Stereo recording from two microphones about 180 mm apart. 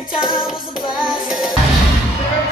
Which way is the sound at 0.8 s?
25° left (ahead or behind).